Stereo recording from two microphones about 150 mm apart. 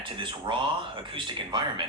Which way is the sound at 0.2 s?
35° right (ahead or behind).